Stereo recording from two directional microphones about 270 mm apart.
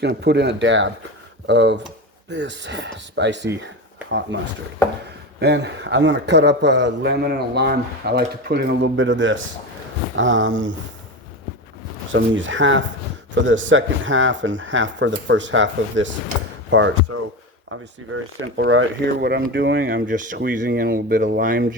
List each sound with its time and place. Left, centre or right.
0.0 s a man's voice: right
5.4 s a man's voice: right
12.1 s speech: right
17.1 s speech: right
18.1 s a man's voice: right